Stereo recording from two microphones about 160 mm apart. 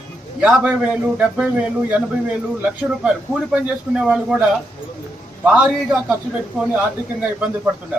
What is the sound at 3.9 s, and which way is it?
Speech, 5° right (ahead or behind).